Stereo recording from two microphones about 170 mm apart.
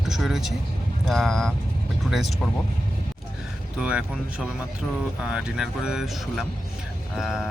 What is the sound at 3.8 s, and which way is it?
Speech, 5° right (ahead or behind).